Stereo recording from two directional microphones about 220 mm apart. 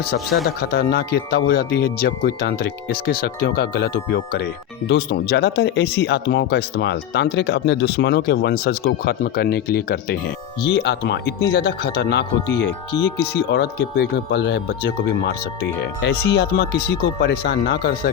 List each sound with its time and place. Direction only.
0.4 s speech: 45° left (ahead or behind)